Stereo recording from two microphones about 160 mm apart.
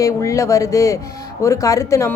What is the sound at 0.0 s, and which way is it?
Speech, 20° left (ahead or behind).